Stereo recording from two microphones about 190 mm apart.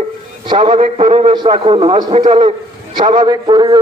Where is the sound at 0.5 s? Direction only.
25° right (ahead or behind).